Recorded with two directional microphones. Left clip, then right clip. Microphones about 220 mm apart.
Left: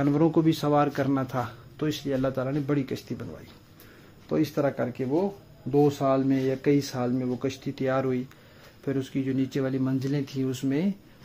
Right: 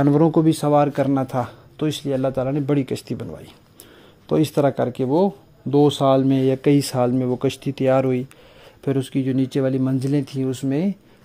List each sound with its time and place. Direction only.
0.0 s speech: 25° right (ahead or behind)
4.3 s speech: 40° right (ahead or behind)